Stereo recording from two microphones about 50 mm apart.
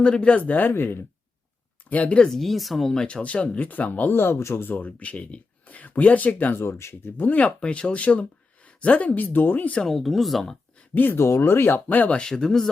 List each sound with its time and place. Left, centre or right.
0.0 s speech: left
0.7 s speech: left
1.9 s speech: left
2.3 s speech: centre
3.1 s speech: left
4.1 s speech: left
4.6 s speech: left
6.5 s speech: left
7.3 s speech: left
9.8 s speech: centre
10.9 s speech: left
11.2 s speech: left
12.1 s speech: centre